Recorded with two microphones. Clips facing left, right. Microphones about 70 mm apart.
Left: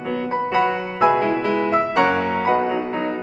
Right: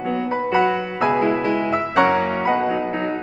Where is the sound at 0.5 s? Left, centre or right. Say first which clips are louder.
Right 2 dB; centre.